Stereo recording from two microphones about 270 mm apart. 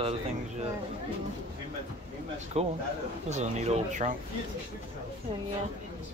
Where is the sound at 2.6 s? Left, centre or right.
Right.